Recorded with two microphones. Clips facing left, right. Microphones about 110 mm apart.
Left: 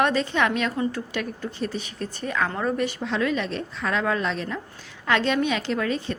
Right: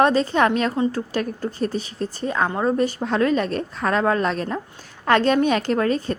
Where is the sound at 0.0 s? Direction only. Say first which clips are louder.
Right 5 dB; 35° right (ahead or behind).